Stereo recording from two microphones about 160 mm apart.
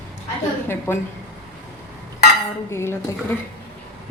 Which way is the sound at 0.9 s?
15° left (ahead or behind).